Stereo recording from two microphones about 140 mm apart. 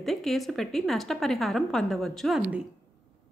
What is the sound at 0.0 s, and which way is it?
A woman's voice, centre (ahead or behind).